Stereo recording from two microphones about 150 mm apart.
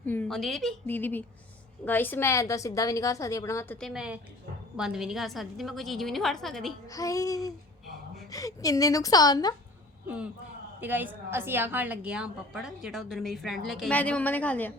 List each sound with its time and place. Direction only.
0.0 s a woman's voice: 10° left (ahead or behind)
0.9 s a woman's voice: 10° left (ahead or behind)
3.8 s a woman's voice: centre (ahead or behind)
6.8 s a woman's voice: 25° left (ahead or behind)
10.8 s a woman's voice: 10° right (ahead or behind); by 14.7 s 10° left (ahead or behind)